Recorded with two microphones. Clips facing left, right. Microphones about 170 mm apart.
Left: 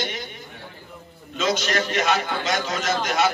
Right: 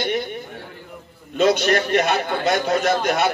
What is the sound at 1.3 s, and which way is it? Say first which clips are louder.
A man's voice: right 6 dB; 60° right (ahead or behind).